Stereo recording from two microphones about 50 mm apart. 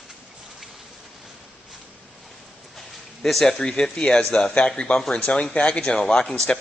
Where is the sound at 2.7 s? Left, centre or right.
Centre.